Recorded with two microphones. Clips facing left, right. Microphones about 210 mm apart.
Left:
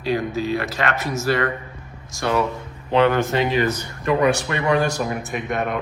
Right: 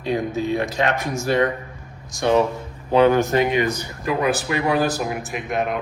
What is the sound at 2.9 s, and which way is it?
A man's voice, 10° right (ahead or behind).